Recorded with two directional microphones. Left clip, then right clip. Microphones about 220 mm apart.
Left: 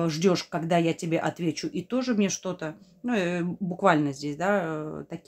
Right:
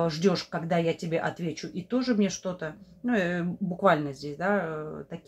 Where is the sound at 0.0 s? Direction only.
35° left (ahead or behind).